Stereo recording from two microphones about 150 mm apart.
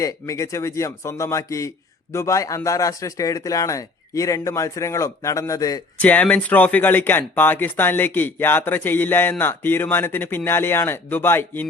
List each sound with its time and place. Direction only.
0.0 s speech: 20° left (ahead or behind)
6.0 s speech: 10° left (ahead or behind)